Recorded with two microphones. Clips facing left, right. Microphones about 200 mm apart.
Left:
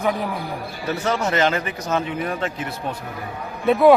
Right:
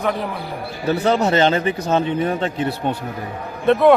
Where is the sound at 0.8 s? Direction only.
35° right (ahead or behind).